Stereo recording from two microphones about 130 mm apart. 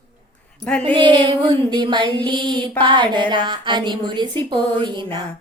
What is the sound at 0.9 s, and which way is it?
A woman's voice, 40° right (ahead or behind).